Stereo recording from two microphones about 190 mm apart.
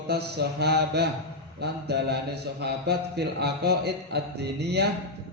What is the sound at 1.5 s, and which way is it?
A man's voice, 60° right (ahead or behind).